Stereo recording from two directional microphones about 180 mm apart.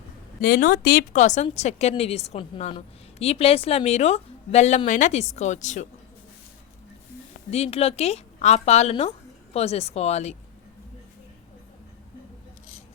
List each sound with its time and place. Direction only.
0.4 s a woman's voice: 55° left (ahead or behind)
7.5 s a woman's voice: 35° left (ahead or behind)